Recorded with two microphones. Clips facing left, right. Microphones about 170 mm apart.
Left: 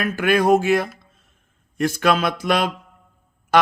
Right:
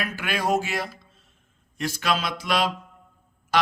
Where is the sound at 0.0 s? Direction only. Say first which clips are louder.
Left 9 dB; 50° left (ahead or behind).